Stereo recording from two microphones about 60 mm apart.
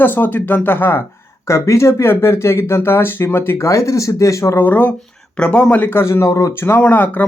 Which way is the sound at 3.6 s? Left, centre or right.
Left.